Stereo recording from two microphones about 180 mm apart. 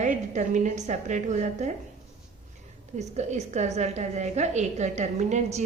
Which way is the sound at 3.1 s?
40° right (ahead or behind).